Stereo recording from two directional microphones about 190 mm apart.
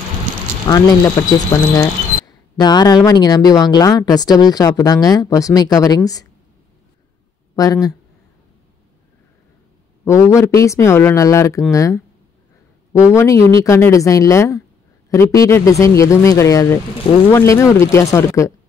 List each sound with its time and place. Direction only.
0.7 s speech: 20° left (ahead or behind)
7.5 s speech: 20° left (ahead or behind)
10.0 s speech: 15° left (ahead or behind)